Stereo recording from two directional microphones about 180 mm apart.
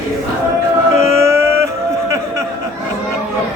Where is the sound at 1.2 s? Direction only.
15° right (ahead or behind).